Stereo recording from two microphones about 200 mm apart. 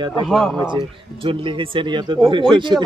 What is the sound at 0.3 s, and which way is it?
Speech, centre (ahead or behind).